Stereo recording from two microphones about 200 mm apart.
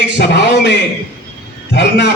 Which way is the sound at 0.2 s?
60° left (ahead or behind).